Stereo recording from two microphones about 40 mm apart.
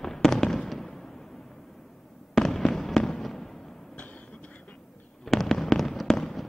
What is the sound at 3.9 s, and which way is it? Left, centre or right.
Train, left.